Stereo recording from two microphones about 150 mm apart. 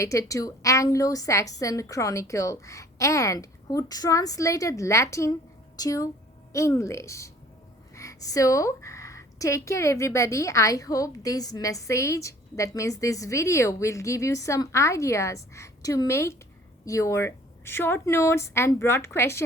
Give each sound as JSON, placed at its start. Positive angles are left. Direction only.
{"t": 0.0, "sound": "a woman's voice", "side_deg": 20}